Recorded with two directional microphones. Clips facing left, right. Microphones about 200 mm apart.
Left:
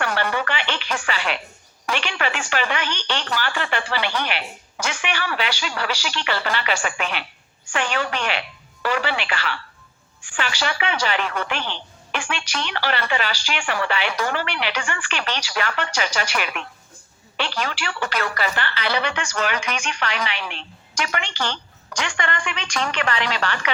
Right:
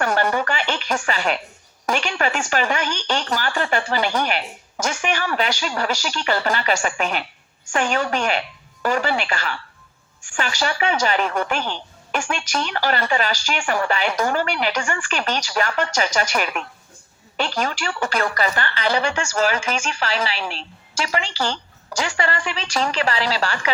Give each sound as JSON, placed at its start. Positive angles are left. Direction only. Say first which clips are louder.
{"t": 0.0, "sound": "music", "louder": "right 3 dB", "side_deg": -45}
{"t": 1.9, "sound": "a woman's voice", "louder": "right 3 dB", "side_deg": -40}